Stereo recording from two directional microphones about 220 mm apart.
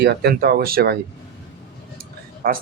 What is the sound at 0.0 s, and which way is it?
Speech, 45° right (ahead or behind).